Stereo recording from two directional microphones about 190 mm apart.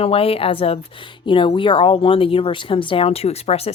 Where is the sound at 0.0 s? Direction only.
30° left (ahead or behind).